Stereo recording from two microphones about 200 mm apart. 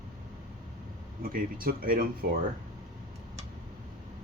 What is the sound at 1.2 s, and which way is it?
Speech, 45° right (ahead or behind).